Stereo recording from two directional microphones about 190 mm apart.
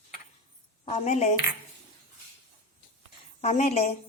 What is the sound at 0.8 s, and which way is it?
Speech, 40° left (ahead or behind).